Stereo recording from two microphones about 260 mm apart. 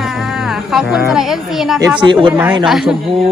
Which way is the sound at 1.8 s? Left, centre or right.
Centre.